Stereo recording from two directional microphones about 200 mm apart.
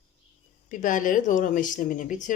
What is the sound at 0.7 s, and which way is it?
Speech, 40° left (ahead or behind).